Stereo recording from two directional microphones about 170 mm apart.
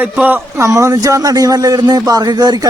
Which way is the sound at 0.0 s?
10° right (ahead or behind).